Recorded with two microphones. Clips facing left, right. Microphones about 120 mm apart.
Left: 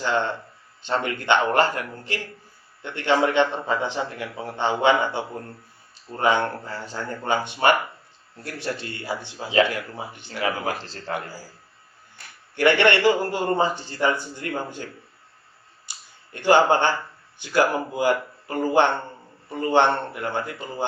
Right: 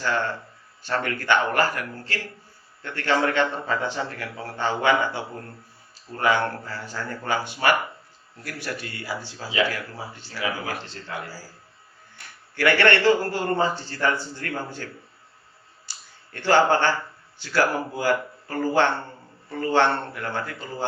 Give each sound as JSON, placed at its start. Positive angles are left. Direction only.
{"t": 0.0, "sound": "a man's voice", "side_deg": 20}
{"t": 10.8, "sound": "speech", "side_deg": 35}
{"t": 11.1, "sound": "a man's voice", "side_deg": 15}
{"t": 12.5, "sound": "a man's voice", "side_deg": 20}
{"t": 15.9, "sound": "a sound", "side_deg": 15}
{"t": 17.3, "sound": "a man's voice", "side_deg": 20}